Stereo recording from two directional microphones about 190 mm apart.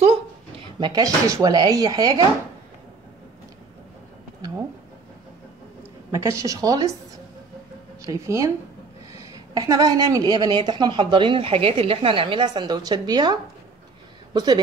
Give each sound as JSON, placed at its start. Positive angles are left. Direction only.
{"t": 0.7, "sound": "a woman's voice", "side_deg": -25}
{"t": 6.1, "sound": "a woman's voice", "side_deg": -15}
{"t": 8.0, "sound": "a woman's voice", "side_deg": -15}
{"t": 9.5, "sound": "a woman's voice", "side_deg": -20}